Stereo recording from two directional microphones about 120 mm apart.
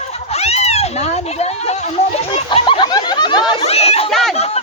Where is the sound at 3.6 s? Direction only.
55° left (ahead or behind).